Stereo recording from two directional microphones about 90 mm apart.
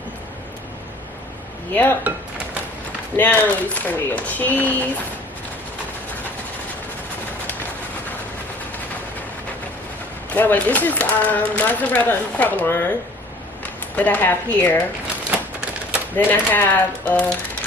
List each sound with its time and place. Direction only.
1.7 s speech: 20° left (ahead or behind)
3.2 s speech: 20° left (ahead or behind)
10.2 s speech: 20° left (ahead or behind)
13.9 s speech: 20° left (ahead or behind)
15.3 s typewriter: 10° right (ahead or behind)
16.1 s speech: 20° left (ahead or behind)